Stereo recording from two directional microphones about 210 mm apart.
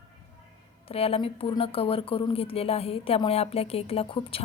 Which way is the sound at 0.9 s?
30° left (ahead or behind).